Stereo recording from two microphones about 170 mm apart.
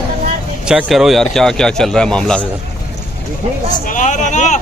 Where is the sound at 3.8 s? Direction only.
50° left (ahead or behind).